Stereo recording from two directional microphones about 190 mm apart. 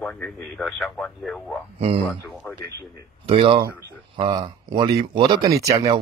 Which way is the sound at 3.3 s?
30° right (ahead or behind).